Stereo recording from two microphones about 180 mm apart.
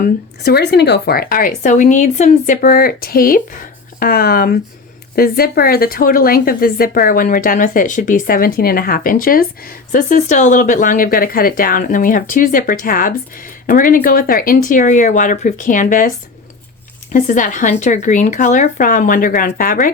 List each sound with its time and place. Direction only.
0.0 s speech: 60° left (ahead or behind)